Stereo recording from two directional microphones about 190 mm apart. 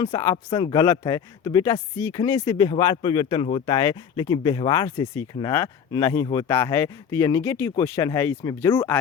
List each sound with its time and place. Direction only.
0.0 s speech: 20° left (ahead or behind)